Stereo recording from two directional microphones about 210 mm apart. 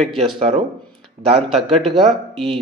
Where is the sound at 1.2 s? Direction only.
30° right (ahead or behind).